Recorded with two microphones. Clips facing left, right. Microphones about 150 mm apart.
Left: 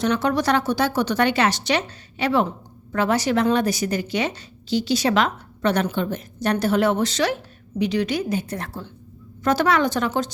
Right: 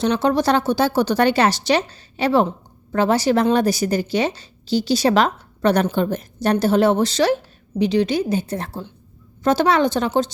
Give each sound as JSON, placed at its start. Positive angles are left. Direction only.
{"t": 0.0, "sound": "a woman's voice", "side_deg": -30}